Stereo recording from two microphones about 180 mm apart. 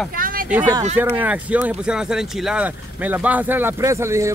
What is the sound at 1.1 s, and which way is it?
Speech, 10° right (ahead or behind).